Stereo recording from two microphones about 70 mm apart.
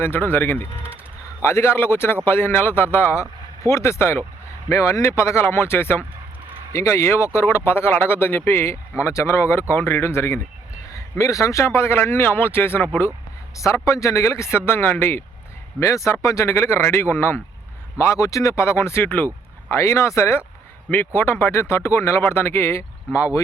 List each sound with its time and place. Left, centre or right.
0.0 s speech: left
1.4 s speech: left
6.7 s speech: left
10.9 s speech: left
13.6 s speech: left
15.8 s speech: left
18.1 s speech: left
19.7 s speech: left
23.1 s speech: left